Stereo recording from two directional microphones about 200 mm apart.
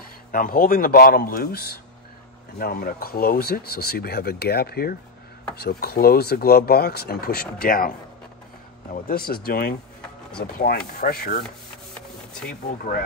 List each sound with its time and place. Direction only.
0.3 s speech: 45° left (ahead or behind)
8.9 s speech: 45° left (ahead or behind)
11.4 s rub: 5° left (ahead or behind)